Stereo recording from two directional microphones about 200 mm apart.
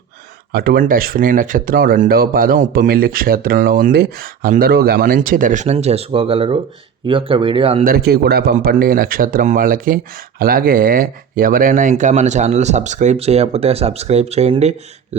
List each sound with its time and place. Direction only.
0.5 s speech: 50° right (ahead or behind); by 7.9 s 30° right (ahead or behind)
7.9 s speech: 50° right (ahead or behind); by 14.8 s 30° right (ahead or behind)